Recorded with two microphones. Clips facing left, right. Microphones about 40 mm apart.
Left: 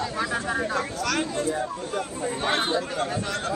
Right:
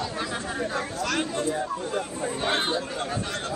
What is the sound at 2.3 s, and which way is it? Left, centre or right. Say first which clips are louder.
Speech: left 2 dB; left.